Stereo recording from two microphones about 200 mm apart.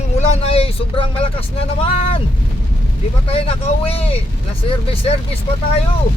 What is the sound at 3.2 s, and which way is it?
Speech, 30° left (ahead or behind).